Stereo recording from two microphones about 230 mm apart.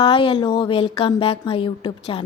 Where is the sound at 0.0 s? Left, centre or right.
Left.